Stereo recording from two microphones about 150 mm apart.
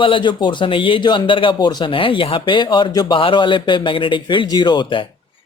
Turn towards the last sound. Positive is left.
turn(degrees=30)  # may be behind; listen again after turning